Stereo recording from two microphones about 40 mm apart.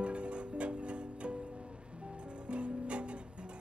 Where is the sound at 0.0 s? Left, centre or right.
Right.